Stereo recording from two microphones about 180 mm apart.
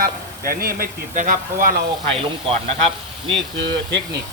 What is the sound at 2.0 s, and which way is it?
Speech, 30° right (ahead or behind).